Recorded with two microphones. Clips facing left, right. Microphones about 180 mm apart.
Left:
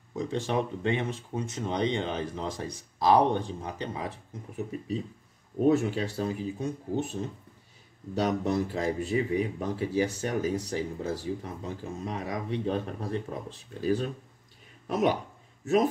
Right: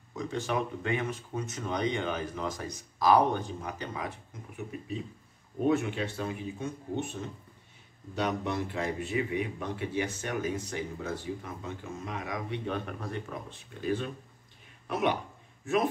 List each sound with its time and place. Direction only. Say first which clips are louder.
0.1 s speech: left 3 dB; 30° left (ahead or behind)